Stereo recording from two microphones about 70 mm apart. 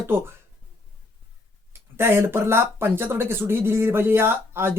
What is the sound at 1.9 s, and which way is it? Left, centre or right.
Speech, right.